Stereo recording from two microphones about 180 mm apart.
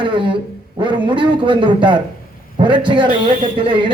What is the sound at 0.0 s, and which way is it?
Speech, 25° right (ahead or behind).